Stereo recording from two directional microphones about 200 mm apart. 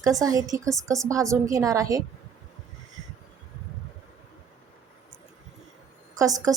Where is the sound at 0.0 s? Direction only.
15° right (ahead or behind).